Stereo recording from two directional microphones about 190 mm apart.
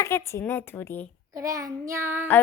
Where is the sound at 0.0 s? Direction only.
15° left (ahead or behind).